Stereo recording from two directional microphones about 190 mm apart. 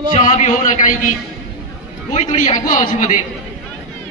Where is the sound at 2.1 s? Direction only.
35° left (ahead or behind).